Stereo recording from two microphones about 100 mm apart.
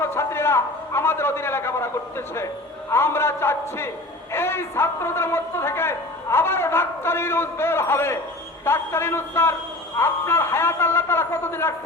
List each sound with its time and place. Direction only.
0.0 s a man's voice: 25° left (ahead or behind)